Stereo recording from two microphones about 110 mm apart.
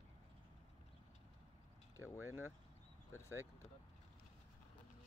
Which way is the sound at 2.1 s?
20° right (ahead or behind).